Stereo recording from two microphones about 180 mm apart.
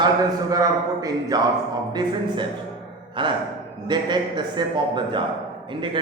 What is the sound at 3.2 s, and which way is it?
A man's voice, 25° right (ahead or behind).